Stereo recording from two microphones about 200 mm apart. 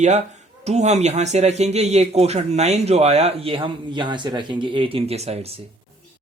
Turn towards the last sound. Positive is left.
turn(degrees=-30)  # may be behind; listen again after turning